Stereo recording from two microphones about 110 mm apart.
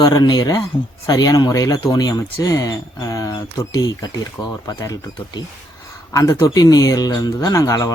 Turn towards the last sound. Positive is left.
turn(degrees=30)  # may be behind; listen again after turning